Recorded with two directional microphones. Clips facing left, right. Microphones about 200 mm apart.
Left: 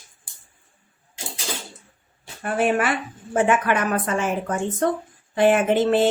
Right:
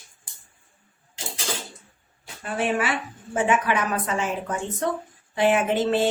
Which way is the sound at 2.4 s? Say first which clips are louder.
Left 4 dB; 55° left (ahead or behind).